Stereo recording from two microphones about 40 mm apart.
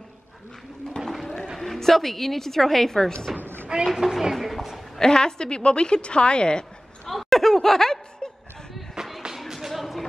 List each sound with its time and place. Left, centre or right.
1.2 s a sound: centre
1.6 s a woman's voice: centre
3.3 s a woman's voice: centre
4.9 s a woman's voice: centre
7.1 s snicker: centre
9.3 s music: centre